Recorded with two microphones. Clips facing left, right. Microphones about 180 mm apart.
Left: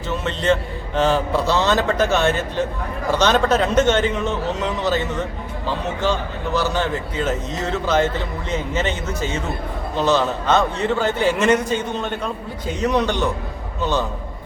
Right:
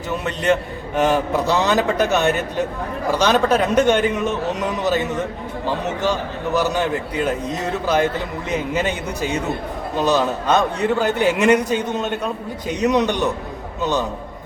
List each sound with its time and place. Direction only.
0.1 s a man's voice: 15° right (ahead or behind)